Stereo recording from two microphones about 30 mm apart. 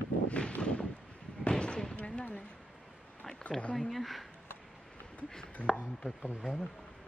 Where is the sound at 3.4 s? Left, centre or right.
Left.